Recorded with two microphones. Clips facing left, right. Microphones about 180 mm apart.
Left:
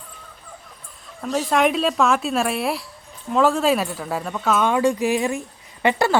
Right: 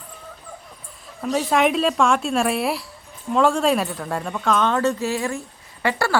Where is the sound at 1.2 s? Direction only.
Centre (ahead or behind).